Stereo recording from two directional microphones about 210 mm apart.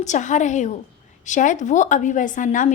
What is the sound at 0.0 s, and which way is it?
A woman's voice, 35° left (ahead or behind).